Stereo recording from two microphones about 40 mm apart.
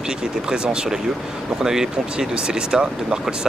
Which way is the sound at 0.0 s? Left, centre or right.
Centre.